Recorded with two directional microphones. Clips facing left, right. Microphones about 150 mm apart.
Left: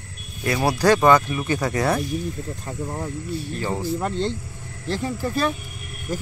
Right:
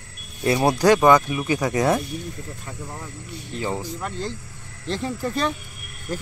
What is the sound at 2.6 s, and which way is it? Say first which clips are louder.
Speech: left 9 dB; 30° left (ahead or behind).